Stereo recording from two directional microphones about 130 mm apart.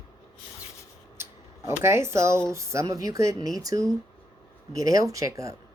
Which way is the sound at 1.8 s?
20° right (ahead or behind).